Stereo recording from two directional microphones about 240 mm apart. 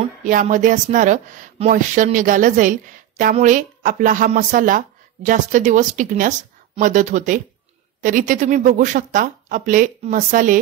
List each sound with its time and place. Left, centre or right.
0.2 s speech: right